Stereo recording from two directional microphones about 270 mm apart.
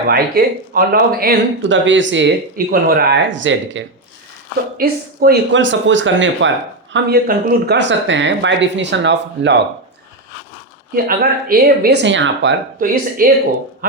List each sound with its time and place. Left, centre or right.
0.1 s speech: right
10.9 s speech: right